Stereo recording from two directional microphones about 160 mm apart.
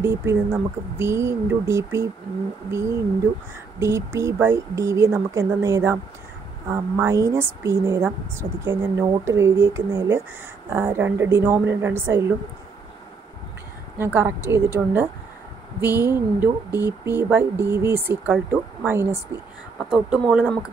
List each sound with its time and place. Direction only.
0.0 s speech: 15° right (ahead or behind)
3.8 s speech: 20° right (ahead or behind)
13.9 s speech: 15° right (ahead or behind)
19.8 s speech: 5° right (ahead or behind)